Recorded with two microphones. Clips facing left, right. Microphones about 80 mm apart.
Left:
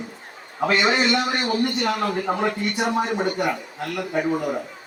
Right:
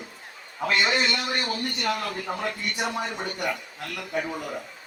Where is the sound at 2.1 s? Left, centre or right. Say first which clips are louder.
Left 7 dB; left.